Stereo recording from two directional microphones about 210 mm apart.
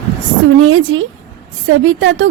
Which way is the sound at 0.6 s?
75° right (ahead or behind).